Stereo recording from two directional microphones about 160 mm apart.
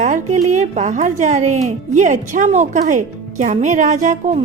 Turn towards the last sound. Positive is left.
turn(degrees=-45)  # may be behind; listen again after turning